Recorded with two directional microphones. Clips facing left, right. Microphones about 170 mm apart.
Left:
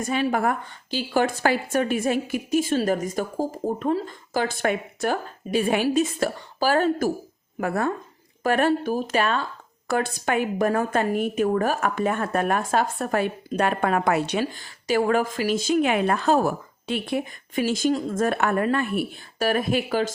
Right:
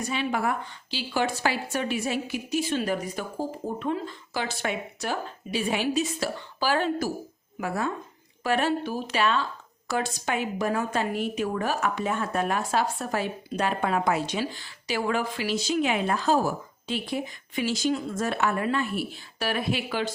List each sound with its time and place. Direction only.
0.0 s a woman's voice: 50° left (ahead or behind)
17.6 s a woman's voice: 50° left (ahead or behind)